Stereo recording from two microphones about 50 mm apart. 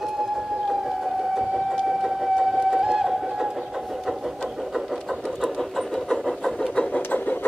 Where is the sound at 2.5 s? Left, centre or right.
Centre.